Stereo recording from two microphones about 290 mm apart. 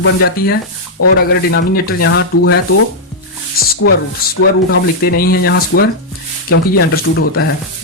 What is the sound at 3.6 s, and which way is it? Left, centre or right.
Music, left.